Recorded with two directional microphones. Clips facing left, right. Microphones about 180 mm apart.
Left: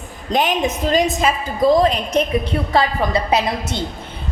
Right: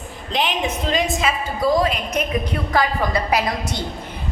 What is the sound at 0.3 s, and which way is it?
Speech, 45° left (ahead or behind).